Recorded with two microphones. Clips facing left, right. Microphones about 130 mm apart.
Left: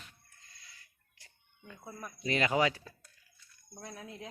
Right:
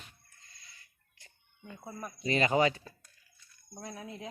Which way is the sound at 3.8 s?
20° right (ahead or behind).